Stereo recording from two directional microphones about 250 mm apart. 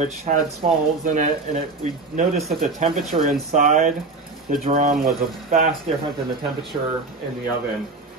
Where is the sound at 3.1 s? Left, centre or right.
Right.